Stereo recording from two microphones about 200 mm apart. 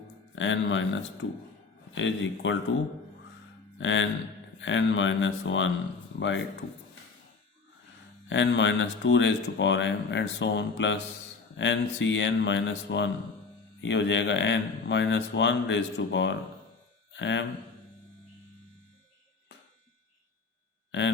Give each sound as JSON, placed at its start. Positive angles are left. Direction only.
{"t": 0.3, "sound": "speech", "side_deg": 70}
{"t": 3.8, "sound": "speech", "side_deg": 70}
{"t": 8.3, "sound": "a man's voice", "side_deg": 65}